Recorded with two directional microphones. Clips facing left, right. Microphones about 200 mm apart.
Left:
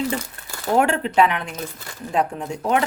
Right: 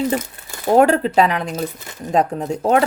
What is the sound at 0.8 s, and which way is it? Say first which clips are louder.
Speech: right 4 dB; 35° right (ahead or behind).